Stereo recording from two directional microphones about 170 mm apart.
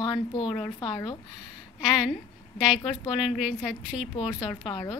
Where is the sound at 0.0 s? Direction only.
25° left (ahead or behind).